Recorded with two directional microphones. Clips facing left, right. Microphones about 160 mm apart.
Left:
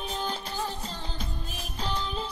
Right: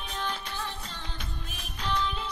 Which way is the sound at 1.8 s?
35° left (ahead or behind).